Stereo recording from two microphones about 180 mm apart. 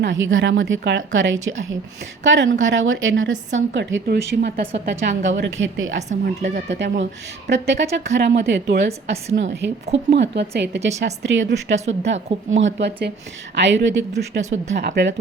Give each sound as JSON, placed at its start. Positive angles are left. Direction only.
{"t": 0.0, "sound": "speech", "side_deg": -90}
{"t": 4.9, "sound": "speech", "side_deg": -85}
{"t": 6.2, "sound": "speech", "side_deg": -70}
{"t": 10.8, "sound": "speech", "side_deg": -80}
{"t": 14.2, "sound": "speech", "side_deg": -70}